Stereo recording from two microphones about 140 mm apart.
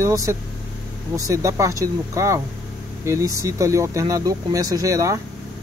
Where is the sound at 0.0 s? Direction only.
20° right (ahead or behind).